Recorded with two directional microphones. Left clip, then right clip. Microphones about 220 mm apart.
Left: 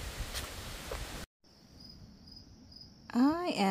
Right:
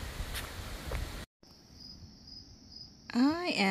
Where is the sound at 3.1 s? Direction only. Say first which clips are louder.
Even; 5° left (ahead or behind).